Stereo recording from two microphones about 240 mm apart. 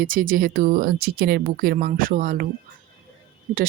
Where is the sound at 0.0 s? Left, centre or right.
Right.